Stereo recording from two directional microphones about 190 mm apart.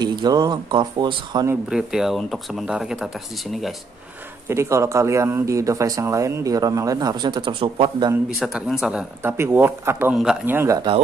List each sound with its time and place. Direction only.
0.0 s speech: 20° right (ahead or behind)
1.5 s speech: 5° right (ahead or behind)
4.5 s speech: 15° right (ahead or behind)
8.4 s speech: centre (ahead or behind); by 11.0 s 20° right (ahead or behind)